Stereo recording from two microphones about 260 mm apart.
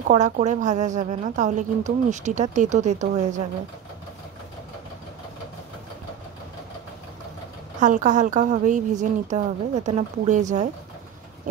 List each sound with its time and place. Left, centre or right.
0.1 s a woman's voice: right
7.8 s a woman's voice: right